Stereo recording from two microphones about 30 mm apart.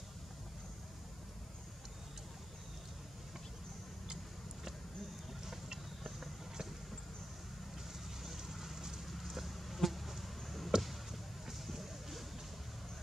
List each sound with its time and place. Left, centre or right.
5.4 s vehicle: centre
8.2 s vehicle: centre
9.8 s insect: centre
10.8 s basketball bounce: centre
11.6 s music: centre